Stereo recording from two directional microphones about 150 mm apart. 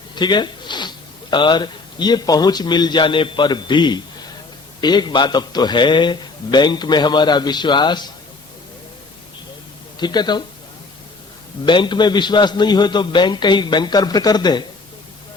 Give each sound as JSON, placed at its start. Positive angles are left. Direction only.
{"t": 0.2, "sound": "a man's voice", "side_deg": 30}
{"t": 10.0, "sound": "a man's voice", "side_deg": 30}
{"t": 11.6, "sound": "a man's voice", "side_deg": 30}